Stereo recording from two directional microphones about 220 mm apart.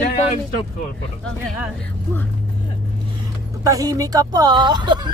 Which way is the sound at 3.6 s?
15° right (ahead or behind).